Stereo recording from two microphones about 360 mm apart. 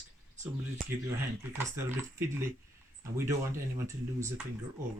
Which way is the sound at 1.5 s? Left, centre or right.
Centre.